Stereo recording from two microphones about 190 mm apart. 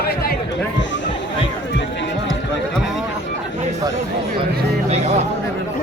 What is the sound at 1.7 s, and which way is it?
Music, 65° left (ahead or behind).